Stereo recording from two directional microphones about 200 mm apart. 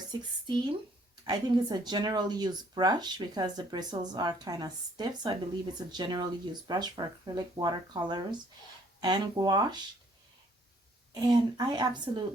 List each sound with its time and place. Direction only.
0.1 s speech: 20° right (ahead or behind)
11.1 s speech: 20° right (ahead or behind)